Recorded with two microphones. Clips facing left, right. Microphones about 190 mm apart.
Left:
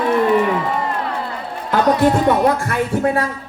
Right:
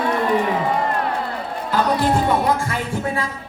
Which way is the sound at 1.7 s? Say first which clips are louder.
Left 4 dB; 60° left (ahead or behind).